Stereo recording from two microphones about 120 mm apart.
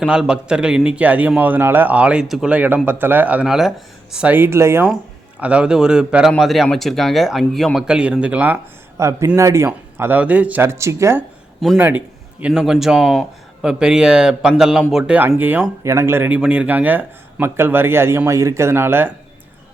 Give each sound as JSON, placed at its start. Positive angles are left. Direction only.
{"t": 0.0, "sound": "a man's voice", "side_deg": -5}
{"t": 5.4, "sound": "a man's voice", "side_deg": -10}
{"t": 9.0, "sound": "a man's voice", "side_deg": -25}
{"t": 15.8, "sound": "a man's voice", "side_deg": -25}